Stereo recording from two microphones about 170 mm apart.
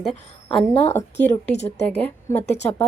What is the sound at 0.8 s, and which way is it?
A woman's voice, 15° left (ahead or behind).